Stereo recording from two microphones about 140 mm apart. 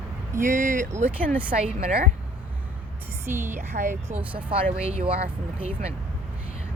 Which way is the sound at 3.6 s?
60° right (ahead or behind).